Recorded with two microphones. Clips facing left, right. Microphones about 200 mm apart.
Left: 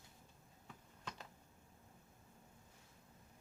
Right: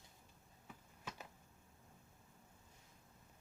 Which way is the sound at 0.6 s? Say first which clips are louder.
Even; 5° right (ahead or behind).